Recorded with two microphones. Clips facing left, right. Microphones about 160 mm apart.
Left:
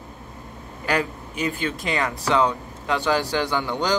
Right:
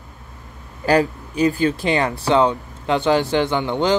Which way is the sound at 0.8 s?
35° right (ahead or behind).